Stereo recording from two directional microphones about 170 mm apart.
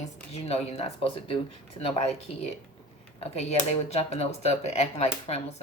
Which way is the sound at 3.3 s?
40° left (ahead or behind).